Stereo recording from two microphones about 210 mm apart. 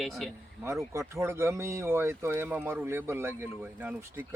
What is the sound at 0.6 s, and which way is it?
Speech, 15° right (ahead or behind).